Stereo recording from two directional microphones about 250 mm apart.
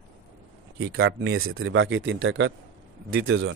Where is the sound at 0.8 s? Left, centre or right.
Right.